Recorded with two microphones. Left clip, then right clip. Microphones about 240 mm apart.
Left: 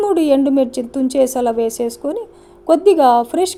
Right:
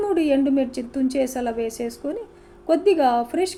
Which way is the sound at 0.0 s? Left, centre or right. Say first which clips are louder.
Left 6 dB; left.